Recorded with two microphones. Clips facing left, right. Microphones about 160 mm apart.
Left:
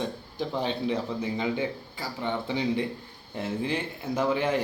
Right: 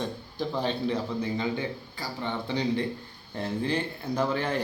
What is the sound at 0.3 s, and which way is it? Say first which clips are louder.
Speech: even; 20° left (ahead or behind).